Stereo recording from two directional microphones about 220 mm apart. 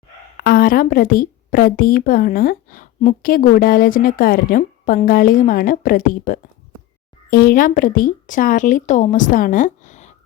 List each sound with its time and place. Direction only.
0.4 s a woman's voice: 40° left (ahead or behind)